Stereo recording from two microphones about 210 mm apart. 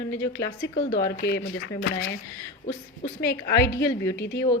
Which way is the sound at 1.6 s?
70° left (ahead or behind).